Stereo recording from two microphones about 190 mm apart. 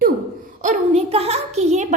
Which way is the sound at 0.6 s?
35° right (ahead or behind).